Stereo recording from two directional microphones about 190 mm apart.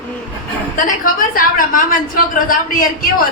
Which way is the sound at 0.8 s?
45° left (ahead or behind).